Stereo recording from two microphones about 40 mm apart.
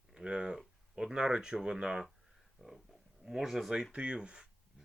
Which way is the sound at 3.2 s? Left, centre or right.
Centre.